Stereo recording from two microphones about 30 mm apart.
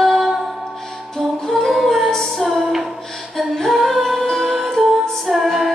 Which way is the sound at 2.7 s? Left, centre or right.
Centre.